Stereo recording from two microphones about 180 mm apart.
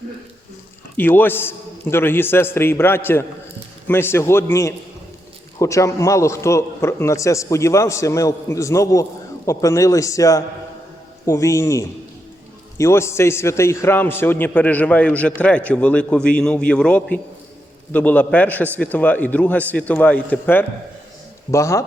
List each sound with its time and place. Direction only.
0.9 s a man's voice: 10° left (ahead or behind)